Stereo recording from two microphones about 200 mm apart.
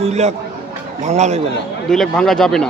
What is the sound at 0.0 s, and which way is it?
Speech, 35° right (ahead or behind).